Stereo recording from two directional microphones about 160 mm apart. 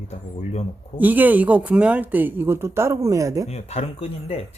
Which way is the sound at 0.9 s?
10° right (ahead or behind).